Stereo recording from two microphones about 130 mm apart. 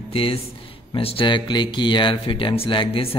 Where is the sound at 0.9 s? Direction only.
45° left (ahead or behind).